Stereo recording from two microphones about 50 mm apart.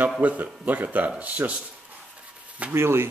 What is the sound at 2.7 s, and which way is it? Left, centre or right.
Speech, right.